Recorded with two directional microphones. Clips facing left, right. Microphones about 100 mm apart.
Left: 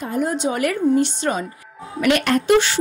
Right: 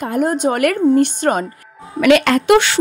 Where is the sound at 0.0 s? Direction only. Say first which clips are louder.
Right 5 dB; 55° right (ahead or behind).